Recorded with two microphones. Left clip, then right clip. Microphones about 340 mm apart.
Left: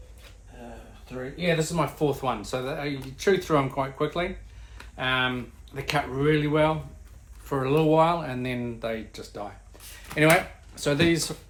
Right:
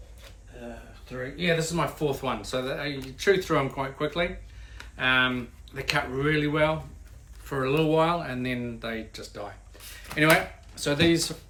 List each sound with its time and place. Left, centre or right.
1.0 s speech: centre
10.8 s speech: centre